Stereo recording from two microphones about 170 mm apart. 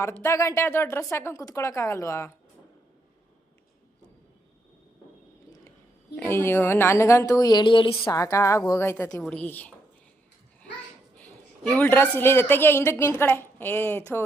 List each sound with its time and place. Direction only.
0.0 s speech: 15° left (ahead or behind)
6.1 s speech: 15° left (ahead or behind); by 7.9 s 30° left (ahead or behind)
8.0 s speech: 20° left (ahead or behind)
11.2 s a sound: 5° left (ahead or behind)
11.9 s speech: 15° left (ahead or behind)